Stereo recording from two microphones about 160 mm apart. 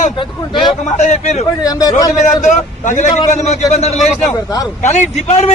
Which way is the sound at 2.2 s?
50° left (ahead or behind).